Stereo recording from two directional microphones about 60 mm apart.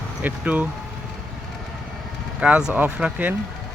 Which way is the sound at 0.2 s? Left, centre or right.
Right.